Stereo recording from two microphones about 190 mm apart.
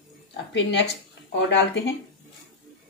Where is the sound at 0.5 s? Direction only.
65° left (ahead or behind).